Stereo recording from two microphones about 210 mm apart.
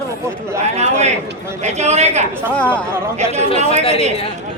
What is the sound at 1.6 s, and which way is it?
Speech, 30° right (ahead or behind).